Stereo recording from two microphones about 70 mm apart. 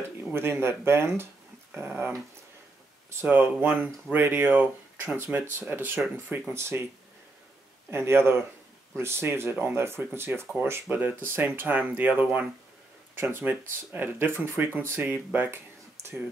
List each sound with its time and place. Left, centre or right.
0.3 s speech: right
3.2 s speech: right
7.9 s speech: right